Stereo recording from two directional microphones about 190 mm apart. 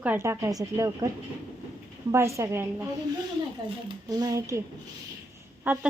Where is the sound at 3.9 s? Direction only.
20° right (ahead or behind).